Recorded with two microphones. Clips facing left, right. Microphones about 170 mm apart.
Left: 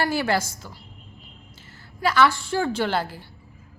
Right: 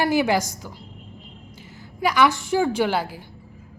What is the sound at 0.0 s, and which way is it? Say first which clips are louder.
Speech: right 3 dB; 15° right (ahead or behind).